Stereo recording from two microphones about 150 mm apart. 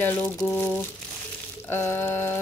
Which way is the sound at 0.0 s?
10° left (ahead or behind).